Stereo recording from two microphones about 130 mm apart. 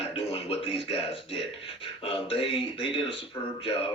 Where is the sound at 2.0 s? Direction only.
45° left (ahead or behind).